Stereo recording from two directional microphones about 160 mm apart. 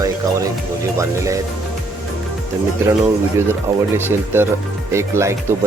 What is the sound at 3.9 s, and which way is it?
Speech, 15° right (ahead or behind).